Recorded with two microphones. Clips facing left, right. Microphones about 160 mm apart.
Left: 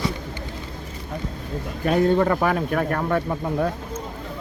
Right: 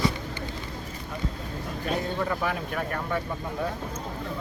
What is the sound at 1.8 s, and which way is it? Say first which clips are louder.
Speech: left 11 dB; 60° left (ahead or behind).